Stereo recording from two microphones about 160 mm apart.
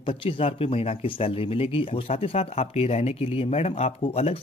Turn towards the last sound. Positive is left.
turn(degrees=40)  # may be behind; listen again after turning